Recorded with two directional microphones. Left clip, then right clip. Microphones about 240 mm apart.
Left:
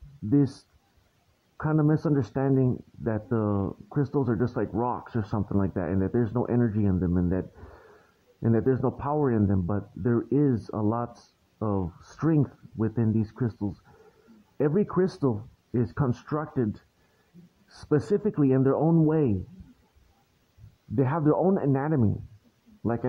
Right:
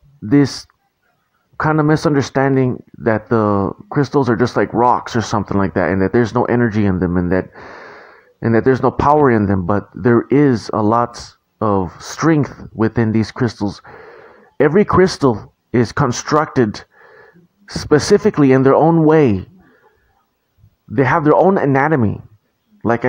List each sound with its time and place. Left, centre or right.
1.6 s speech: right
16.1 s speech: right
16.3 s speech: right
17.8 s speech: right
20.9 s speech: right